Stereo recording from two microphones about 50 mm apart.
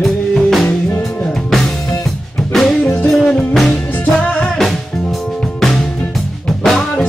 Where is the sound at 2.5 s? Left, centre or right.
Centre.